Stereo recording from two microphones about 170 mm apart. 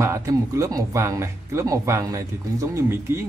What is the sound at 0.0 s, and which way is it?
Speech, 15° right (ahead or behind).